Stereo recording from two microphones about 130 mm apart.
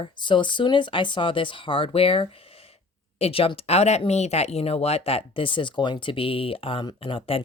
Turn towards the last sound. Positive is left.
turn(degrees=45)  # may be behind; listen again after turning